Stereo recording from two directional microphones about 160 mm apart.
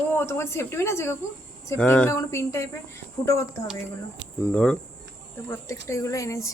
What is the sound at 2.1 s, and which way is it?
Speech, 20° left (ahead or behind).